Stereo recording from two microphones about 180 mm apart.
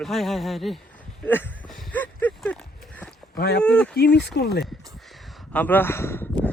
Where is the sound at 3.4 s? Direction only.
60° left (ahead or behind).